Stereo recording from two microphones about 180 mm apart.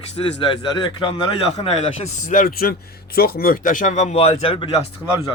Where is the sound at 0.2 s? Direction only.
30° left (ahead or behind).